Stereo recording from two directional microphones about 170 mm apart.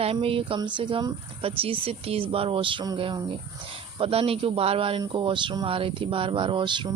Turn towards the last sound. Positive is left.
turn(degrees=-25)  # may be behind; listen again after turning